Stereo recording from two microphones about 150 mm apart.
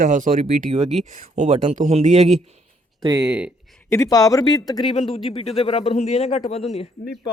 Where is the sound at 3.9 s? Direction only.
20° left (ahead or behind).